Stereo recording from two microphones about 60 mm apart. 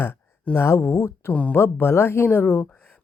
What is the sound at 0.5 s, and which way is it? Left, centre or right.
Speech, left.